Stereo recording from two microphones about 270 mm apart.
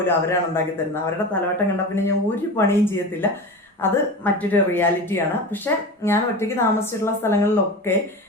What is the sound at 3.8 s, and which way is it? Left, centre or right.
Speech, centre.